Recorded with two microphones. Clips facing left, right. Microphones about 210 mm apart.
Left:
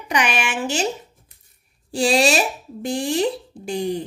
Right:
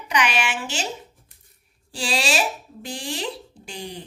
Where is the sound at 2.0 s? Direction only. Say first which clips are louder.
Left 7 dB; 50° left (ahead or behind).